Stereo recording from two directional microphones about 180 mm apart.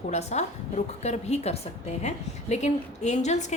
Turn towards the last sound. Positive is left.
turn(degrees=40)  # may be behind; listen again after turning